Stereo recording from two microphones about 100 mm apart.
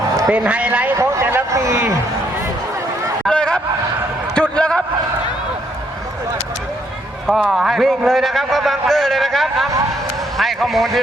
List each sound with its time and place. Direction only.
0.3 s a man's voice: 10° right (ahead or behind)
0.9 s speech: 30° right (ahead or behind)
3.2 s a sound: 10° left (ahead or behind)
7.3 s a man's voice: centre (ahead or behind)